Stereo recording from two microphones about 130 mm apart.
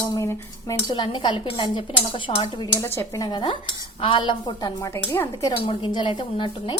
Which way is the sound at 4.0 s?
40° left (ahead or behind).